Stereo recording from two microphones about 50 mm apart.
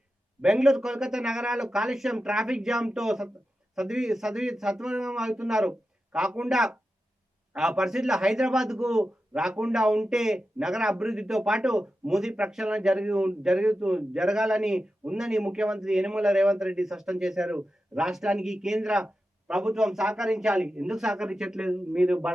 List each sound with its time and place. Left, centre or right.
0.4 s a man's voice: centre